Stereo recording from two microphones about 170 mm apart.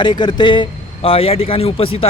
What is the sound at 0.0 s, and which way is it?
A man's voice, 25° left (ahead or behind).